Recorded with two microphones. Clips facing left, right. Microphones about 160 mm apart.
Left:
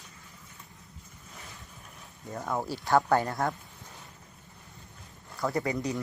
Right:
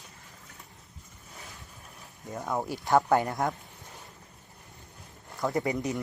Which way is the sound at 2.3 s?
Centre (ahead or behind).